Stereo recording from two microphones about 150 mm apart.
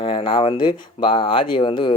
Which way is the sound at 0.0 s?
35° left (ahead or behind).